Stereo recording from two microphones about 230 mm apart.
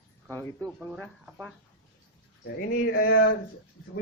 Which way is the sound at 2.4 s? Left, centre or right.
Left.